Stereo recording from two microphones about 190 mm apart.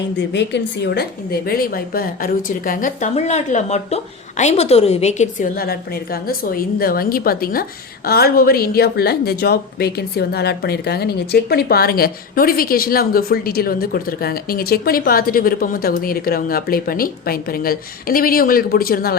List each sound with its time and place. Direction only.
0.2 s a woman's voice: 65° left (ahead or behind)